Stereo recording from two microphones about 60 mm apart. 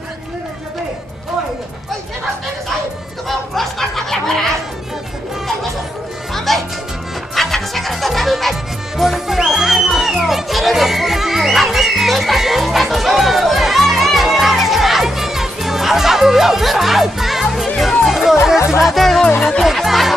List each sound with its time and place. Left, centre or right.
3.3 s chatter: centre
6.3 s music: centre